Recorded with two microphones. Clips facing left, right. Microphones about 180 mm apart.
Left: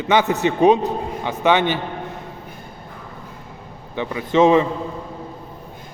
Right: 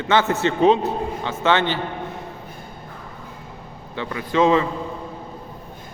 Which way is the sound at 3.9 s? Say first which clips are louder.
Left 3 dB; 15° left (ahead or behind).